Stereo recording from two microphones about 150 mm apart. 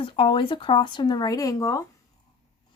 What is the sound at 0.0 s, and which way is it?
Speech, 35° left (ahead or behind).